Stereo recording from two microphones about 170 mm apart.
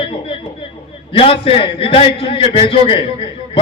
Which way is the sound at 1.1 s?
35° left (ahead or behind).